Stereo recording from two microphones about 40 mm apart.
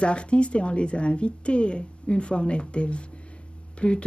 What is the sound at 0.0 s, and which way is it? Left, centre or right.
Speech, left.